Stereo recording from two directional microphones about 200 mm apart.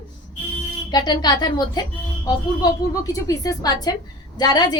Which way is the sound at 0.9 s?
20° left (ahead or behind).